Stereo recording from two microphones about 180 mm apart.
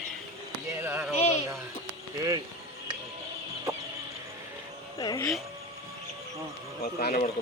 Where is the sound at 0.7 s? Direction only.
10° right (ahead or behind).